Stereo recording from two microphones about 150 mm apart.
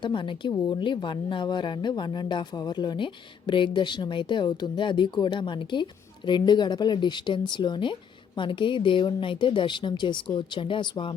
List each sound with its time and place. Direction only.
0.0 s speech: 35° left (ahead or behind)